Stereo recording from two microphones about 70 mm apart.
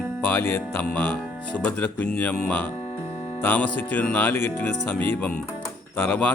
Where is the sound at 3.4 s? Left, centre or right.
Left.